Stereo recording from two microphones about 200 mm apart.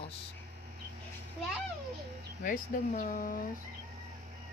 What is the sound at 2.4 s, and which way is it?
Speech, 45° left (ahead or behind).